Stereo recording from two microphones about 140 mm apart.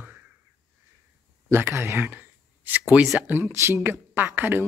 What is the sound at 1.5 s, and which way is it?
Speech, 15° right (ahead or behind).